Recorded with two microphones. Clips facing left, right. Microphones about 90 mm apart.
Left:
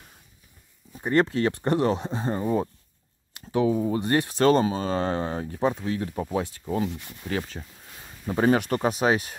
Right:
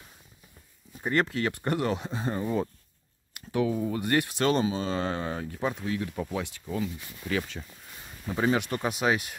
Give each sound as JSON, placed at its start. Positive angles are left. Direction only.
{"t": 1.1, "sound": "speech", "side_deg": 30}